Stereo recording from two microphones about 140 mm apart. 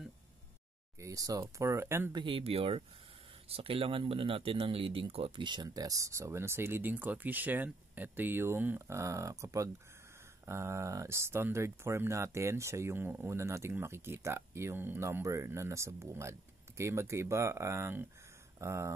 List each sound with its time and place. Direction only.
1.0 s speech: 25° right (ahead or behind)
2.1 s speech: 40° right (ahead or behind); by 18.9 s 20° right (ahead or behind)